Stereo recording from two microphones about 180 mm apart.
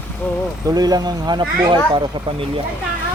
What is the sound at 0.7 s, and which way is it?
Speech, 20° right (ahead or behind).